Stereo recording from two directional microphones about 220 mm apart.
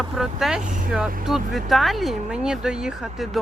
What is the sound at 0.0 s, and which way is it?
Speech, centre (ahead or behind).